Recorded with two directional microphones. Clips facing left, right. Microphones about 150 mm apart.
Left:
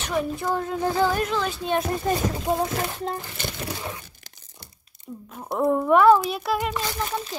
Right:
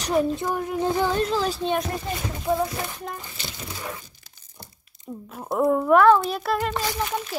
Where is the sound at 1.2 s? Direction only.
35° right (ahead or behind).